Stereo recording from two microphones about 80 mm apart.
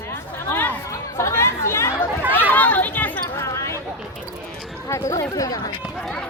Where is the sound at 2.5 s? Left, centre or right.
Left.